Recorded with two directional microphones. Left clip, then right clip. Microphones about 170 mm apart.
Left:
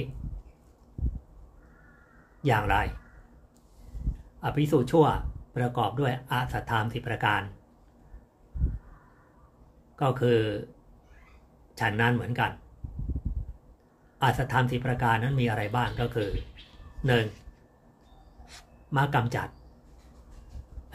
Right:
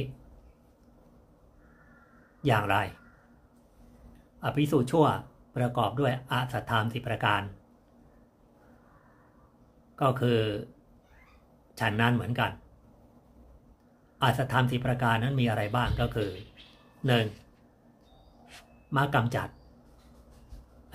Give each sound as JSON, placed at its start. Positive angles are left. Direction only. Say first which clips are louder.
{"t": 2.4, "sound": "speech", "louder": "left 1 dB", "side_deg": -15}
{"t": 4.4, "sound": "speech", "louder": "left 1 dB", "side_deg": -15}
{"t": 9.9, "sound": "speech", "louder": "left 2 dB", "side_deg": -15}
{"t": 11.7, "sound": "speech", "louder": "left 1 dB", "side_deg": -15}
{"t": 14.1, "sound": "speech", "louder": "left 1 dB", "side_deg": -15}
{"t": 18.9, "sound": "speech", "louder": "even", "side_deg": -15}